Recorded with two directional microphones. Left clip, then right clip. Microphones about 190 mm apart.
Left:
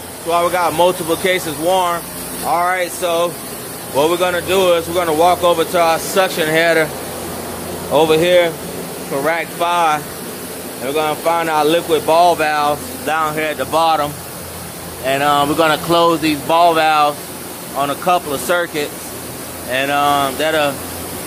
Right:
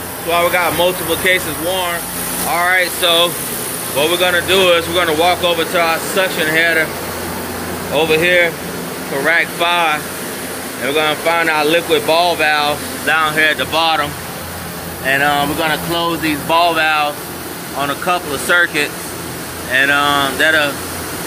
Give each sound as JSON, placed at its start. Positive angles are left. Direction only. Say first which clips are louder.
{"t": 0.3, "sound": "speech", "louder": "right 1 dB", "side_deg": 20}
{"t": 2.5, "sound": "speech", "louder": "right 2 dB", "side_deg": 15}
{"t": 7.9, "sound": "speech", "louder": "left 1 dB", "side_deg": 25}
{"t": 9.2, "sound": "speech", "louder": "right 4 dB", "side_deg": 10}
{"t": 15.0, "sound": "speech", "louder": "even", "side_deg": 20}